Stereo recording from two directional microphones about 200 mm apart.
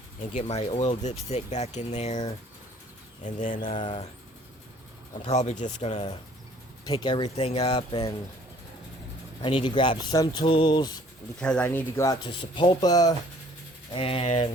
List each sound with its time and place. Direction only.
0.3 s speech: 35° left (ahead or behind)
3.7 s speech: 25° left (ahead or behind)
5.2 s speech: 35° left (ahead or behind)
6.9 s speech: 20° left (ahead or behind)
9.4 s speech: 25° left (ahead or behind)
11.3 s speech: 5° left (ahead or behind); by 14.5 s 30° left (ahead or behind)